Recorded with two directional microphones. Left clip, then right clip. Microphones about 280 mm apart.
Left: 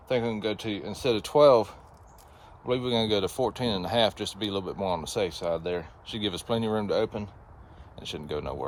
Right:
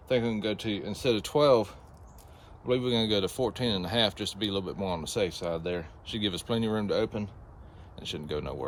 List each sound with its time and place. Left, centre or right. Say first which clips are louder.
0.1 s speech: left 1 dB; centre